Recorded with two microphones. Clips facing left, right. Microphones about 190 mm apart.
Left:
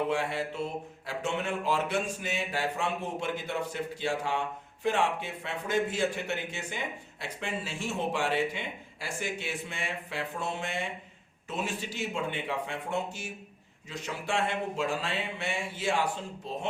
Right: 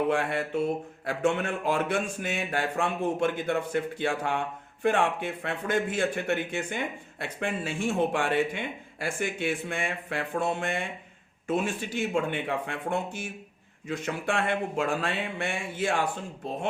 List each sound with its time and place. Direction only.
0.1 s speech: 55° right (ahead or behind)